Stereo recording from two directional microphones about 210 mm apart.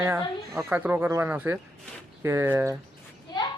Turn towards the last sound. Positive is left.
turn(degrees=20)  # may be behind; listen again after turning